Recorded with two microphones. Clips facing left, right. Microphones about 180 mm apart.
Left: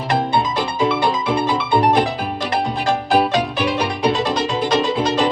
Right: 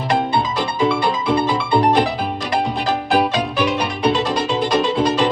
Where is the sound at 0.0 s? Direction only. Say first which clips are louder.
Even; centre (ahead or behind).